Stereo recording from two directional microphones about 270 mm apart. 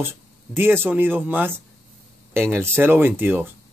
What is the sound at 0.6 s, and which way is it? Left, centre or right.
Speech, centre.